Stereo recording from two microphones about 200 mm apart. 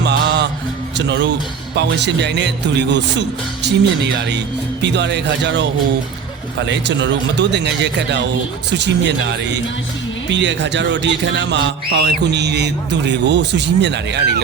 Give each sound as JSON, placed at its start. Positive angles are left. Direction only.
{"t": 0.0, "sound": "music", "side_deg": -55}
{"t": 0.9, "sound": "speech", "side_deg": -60}